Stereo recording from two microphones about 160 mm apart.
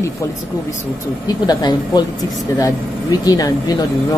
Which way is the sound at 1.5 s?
25° left (ahead or behind).